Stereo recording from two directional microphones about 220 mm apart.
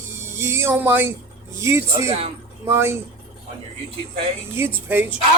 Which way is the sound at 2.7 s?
10° right (ahead or behind).